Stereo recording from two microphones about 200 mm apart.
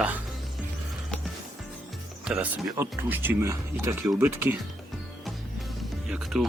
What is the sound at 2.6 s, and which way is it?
Speech, 10° right (ahead or behind).